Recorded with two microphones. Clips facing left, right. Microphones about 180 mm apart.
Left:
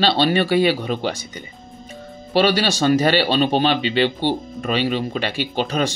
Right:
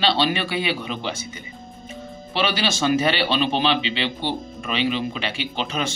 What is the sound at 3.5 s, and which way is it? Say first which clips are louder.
Speech: left 4 dB; 45° left (ahead or behind).